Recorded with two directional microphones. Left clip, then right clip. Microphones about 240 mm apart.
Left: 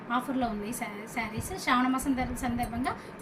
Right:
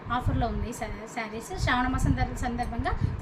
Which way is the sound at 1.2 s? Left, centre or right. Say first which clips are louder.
Even; right.